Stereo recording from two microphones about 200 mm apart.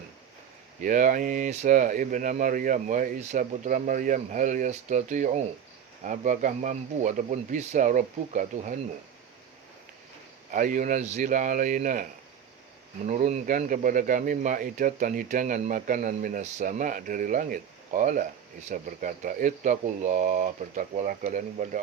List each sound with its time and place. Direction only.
0.8 s speech: 40° right (ahead or behind)
10.5 s speech: 40° right (ahead or behind)
13.1 s speech: 35° right (ahead or behind)